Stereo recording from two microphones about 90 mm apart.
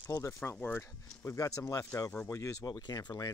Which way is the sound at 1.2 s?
35° left (ahead or behind).